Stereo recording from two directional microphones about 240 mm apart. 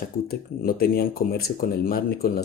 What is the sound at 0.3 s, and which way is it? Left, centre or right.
Speech, left.